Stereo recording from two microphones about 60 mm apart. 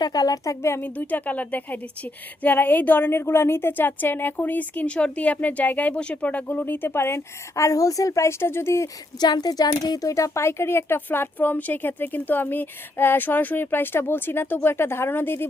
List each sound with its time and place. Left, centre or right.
0.1 s speech: left
0.8 s speech: left
3.1 s speech: left
7.5 s a woman's voice: left
9.4 s speech: left